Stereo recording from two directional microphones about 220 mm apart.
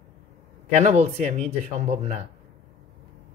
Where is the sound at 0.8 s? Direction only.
30° right (ahead or behind).